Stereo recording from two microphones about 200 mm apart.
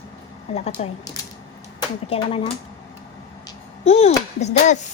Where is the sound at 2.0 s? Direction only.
30° left (ahead or behind).